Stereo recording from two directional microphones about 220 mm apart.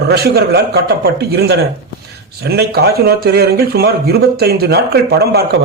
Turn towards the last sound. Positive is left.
turn(degrees=-45)  # may be behind; listen again after turning